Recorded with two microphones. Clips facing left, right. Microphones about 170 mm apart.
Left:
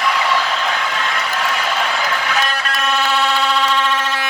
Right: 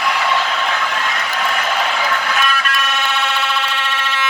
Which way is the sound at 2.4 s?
35° left (ahead or behind).